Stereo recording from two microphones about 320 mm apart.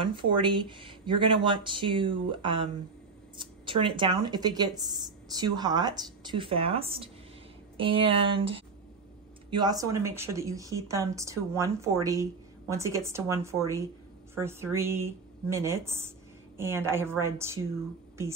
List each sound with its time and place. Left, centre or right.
0.0 s speech: centre